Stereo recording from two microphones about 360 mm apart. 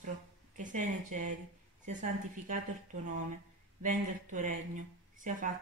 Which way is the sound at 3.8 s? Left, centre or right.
Right.